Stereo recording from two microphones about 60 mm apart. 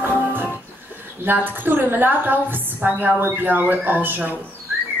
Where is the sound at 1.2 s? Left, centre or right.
Right.